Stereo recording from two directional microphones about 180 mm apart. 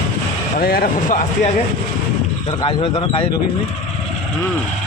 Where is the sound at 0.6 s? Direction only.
55° left (ahead or behind).